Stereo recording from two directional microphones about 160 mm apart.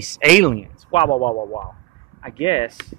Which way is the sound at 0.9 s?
35° left (ahead or behind).